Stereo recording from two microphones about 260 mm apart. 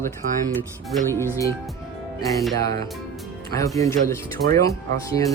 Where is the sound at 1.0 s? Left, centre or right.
Centre.